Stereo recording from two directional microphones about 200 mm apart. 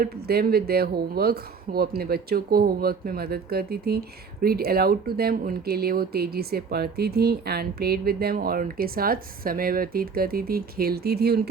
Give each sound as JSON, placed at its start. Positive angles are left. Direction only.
{"t": 0.0, "sound": "speech", "side_deg": -50}